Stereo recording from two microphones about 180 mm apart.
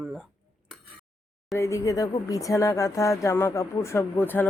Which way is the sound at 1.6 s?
15° left (ahead or behind).